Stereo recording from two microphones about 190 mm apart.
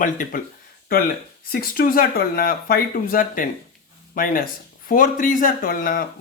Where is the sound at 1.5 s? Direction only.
50° left (ahead or behind).